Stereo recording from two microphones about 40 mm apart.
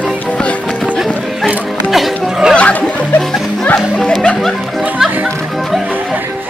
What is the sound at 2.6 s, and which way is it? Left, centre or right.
Music, left.